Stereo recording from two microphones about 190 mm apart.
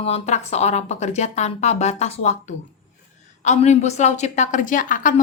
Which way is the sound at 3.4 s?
40° left (ahead or behind).